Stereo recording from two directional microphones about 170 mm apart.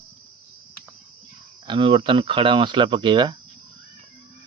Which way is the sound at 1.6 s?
30° right (ahead or behind).